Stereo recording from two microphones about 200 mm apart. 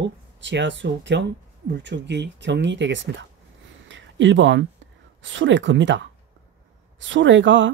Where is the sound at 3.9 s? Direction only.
65° right (ahead or behind).